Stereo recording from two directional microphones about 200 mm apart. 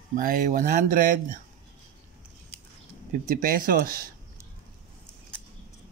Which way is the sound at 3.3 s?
45° right (ahead or behind).